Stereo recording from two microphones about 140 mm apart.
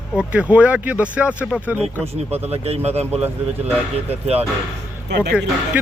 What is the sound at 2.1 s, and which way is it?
Speech, 50° right (ahead or behind).